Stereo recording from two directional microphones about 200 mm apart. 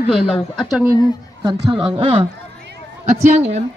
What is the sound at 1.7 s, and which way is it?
Speech, 25° right (ahead or behind).